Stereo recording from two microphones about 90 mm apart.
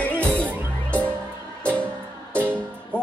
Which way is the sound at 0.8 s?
15° left (ahead or behind).